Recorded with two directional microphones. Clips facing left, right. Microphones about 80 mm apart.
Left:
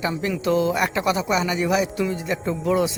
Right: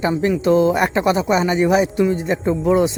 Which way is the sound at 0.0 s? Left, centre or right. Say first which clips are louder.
Right 6 dB; right.